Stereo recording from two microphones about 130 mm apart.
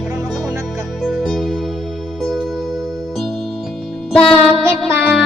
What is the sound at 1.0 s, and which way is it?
Music, centre (ahead or behind).